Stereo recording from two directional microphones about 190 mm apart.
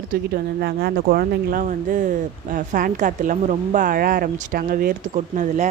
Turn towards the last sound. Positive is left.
turn(degrees=-40)  # may be behind; listen again after turning